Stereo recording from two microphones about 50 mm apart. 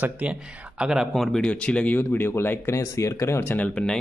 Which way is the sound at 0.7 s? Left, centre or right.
Centre.